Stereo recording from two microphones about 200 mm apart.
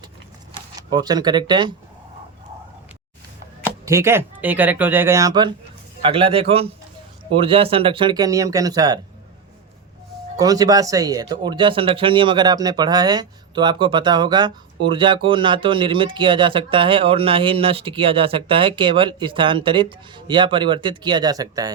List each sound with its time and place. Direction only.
0.8 s speech: 20° right (ahead or behind)
3.8 s speech: 15° right (ahead or behind)
10.3 s speech: 20° right (ahead or behind)